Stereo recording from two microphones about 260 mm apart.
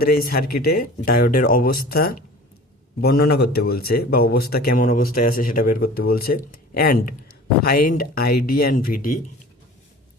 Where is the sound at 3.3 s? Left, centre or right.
Left.